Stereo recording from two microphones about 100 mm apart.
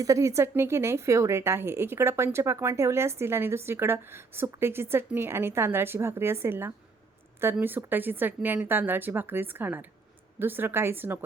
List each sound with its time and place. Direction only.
0.0 s a woman's voice: 35° right (ahead or behind)